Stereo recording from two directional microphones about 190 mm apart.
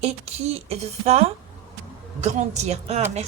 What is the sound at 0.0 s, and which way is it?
A woman's voice, 35° right (ahead or behind).